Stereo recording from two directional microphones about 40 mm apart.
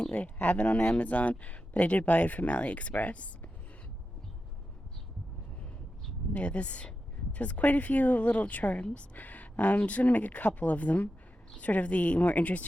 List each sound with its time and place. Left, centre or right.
0.1 s speech: left
0.9 s speech: left
6.3 s speech: left
9.1 s speech: left